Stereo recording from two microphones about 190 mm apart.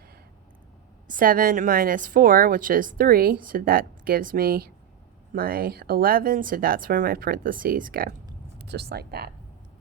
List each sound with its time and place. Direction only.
1.0 s a woman's voice: 45° right (ahead or behind)
8.5 s speech: 60° right (ahead or behind)